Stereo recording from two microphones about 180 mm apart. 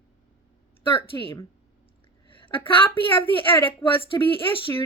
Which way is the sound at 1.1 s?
20° left (ahead or behind).